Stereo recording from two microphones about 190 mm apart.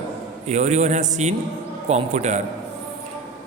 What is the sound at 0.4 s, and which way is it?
Speech, 35° right (ahead or behind).